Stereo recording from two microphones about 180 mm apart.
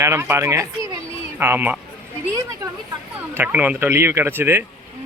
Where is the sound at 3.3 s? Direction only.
10° right (ahead or behind).